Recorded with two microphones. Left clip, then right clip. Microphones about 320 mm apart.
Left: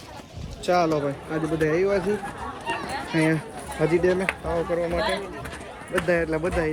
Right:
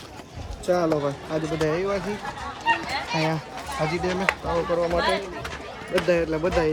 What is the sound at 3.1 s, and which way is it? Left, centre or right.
Speech, centre.